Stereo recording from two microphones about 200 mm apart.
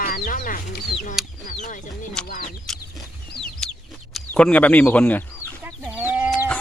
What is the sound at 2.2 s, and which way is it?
Speech, 5° left (ahead or behind).